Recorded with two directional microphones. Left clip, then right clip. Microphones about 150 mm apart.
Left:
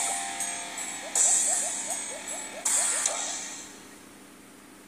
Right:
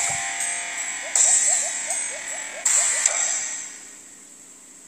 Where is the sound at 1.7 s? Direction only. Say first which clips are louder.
Right 6 dB; 45° right (ahead or behind).